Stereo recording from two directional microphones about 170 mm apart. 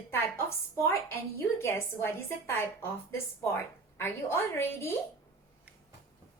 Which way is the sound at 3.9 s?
15° left (ahead or behind).